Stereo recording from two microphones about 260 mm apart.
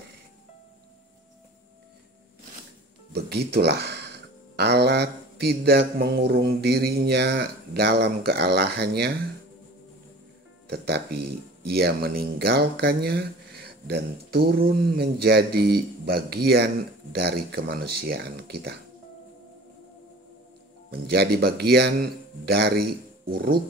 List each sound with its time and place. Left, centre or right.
3.1 s speech: right
10.7 s speech: right
20.9 s speech: right